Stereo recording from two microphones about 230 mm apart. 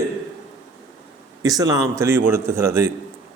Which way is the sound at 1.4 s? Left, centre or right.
Centre.